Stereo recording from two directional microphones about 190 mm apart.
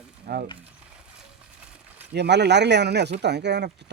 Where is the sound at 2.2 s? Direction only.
65° right (ahead or behind).